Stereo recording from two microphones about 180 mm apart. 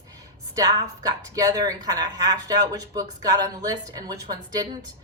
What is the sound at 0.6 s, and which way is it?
A woman's voice, 20° right (ahead or behind).